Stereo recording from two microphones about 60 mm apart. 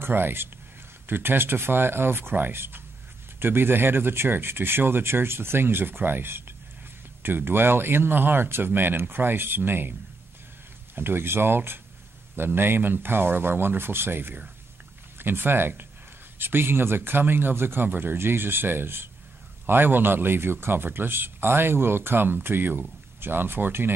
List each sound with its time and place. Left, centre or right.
0.0 s speech: right
11.0 s speech: right